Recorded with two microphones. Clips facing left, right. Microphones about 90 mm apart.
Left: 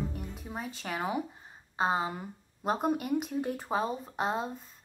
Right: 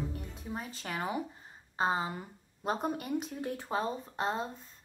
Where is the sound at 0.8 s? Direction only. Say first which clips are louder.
Left 3 dB; 5° left (ahead or behind).